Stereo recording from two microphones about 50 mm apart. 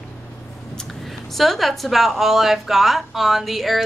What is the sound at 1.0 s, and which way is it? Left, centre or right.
A woman's voice, centre.